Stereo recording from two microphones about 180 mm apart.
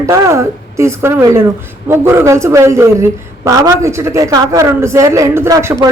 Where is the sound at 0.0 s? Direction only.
15° right (ahead or behind).